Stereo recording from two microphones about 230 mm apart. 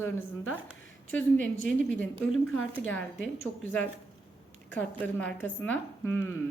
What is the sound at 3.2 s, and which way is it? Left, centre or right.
Speech, left.